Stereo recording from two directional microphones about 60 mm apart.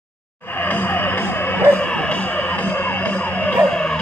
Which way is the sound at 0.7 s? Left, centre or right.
Left.